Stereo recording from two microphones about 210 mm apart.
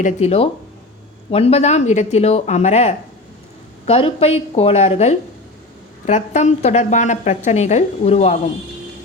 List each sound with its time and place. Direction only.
0.0 s a woman's voice: 30° left (ahead or behind)